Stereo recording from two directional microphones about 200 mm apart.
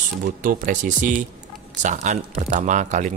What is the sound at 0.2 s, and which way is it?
Speech, 40° right (ahead or behind).